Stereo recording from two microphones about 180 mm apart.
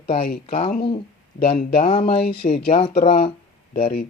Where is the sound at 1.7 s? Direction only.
30° left (ahead or behind).